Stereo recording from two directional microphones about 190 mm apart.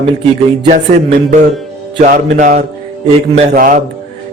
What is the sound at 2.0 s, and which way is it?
A man's voice, 45° right (ahead or behind).